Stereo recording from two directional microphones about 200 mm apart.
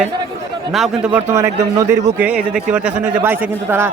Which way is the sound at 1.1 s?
10° right (ahead or behind).